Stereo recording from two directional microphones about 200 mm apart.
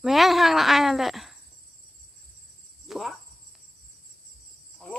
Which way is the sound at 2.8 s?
Centre (ahead or behind).